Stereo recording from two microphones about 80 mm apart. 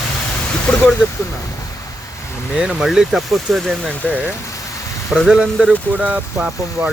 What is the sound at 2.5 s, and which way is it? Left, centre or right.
Speech, centre.